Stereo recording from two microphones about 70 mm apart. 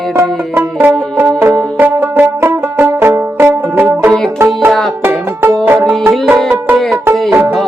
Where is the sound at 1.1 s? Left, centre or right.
Right.